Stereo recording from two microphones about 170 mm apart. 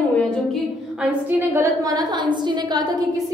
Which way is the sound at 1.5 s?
20° right (ahead or behind).